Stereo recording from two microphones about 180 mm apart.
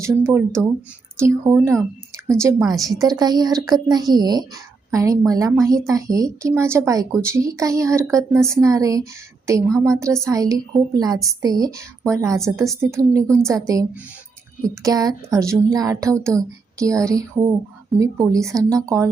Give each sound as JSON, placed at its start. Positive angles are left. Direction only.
{"t": 0.0, "sound": "a woman's voice", "side_deg": -15}